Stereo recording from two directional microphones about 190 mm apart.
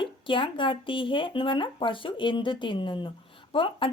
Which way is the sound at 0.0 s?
25° left (ahead or behind).